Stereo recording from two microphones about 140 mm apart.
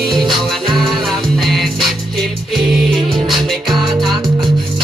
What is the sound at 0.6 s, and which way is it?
Music, 35° right (ahead or behind).